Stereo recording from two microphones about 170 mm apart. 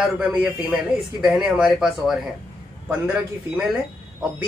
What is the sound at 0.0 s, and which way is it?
Speech, 5° right (ahead or behind).